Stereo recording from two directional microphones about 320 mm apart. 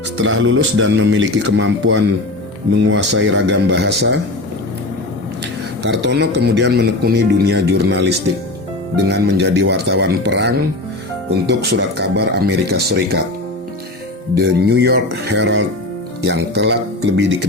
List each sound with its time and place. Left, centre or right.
0.2 s speech: right
5.8 s speech: right
14.3 s speech: right